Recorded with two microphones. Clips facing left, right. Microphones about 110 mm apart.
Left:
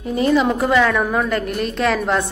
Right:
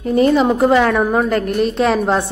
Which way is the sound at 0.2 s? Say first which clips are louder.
Right 3 dB; 40° right (ahead or behind).